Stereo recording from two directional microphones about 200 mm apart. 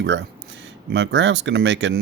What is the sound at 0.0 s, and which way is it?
Speech, 60° right (ahead or behind).